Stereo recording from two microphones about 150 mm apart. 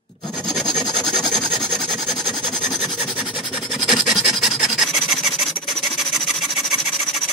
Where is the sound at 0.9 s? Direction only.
25° left (ahead or behind).